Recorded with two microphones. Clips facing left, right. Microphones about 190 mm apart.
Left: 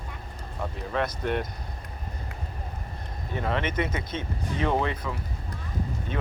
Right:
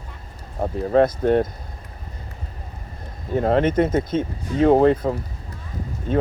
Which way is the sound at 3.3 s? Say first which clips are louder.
Right 10 dB; 45° right (ahead or behind).